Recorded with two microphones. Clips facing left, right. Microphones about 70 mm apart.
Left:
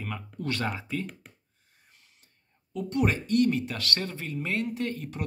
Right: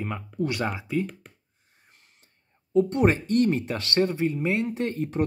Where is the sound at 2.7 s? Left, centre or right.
Right.